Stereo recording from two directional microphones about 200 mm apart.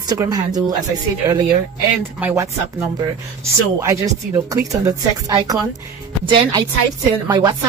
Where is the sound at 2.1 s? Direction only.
10° right (ahead or behind).